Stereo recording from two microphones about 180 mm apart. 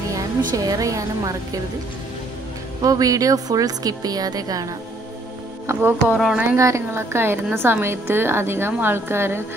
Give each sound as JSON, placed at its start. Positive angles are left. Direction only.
{"t": 0.5, "sound": "a woman's voice", "side_deg": -20}
{"t": 2.8, "sound": "a woman's voice", "side_deg": -20}
{"t": 5.7, "sound": "a woman's voice", "side_deg": -10}
{"t": 6.4, "sound": "a woman's voice", "side_deg": -15}